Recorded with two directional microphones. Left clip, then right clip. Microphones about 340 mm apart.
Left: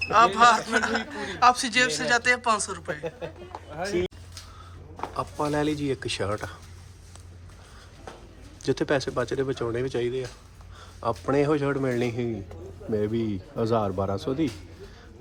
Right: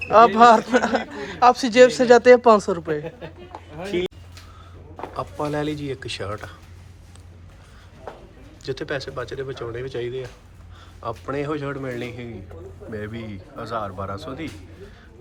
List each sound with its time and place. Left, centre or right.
0.1 s speech: centre
4.9 s speech: centre
8.6 s a man's voice: left